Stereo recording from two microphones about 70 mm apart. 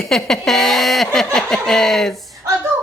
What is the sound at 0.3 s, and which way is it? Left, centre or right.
Speech, centre.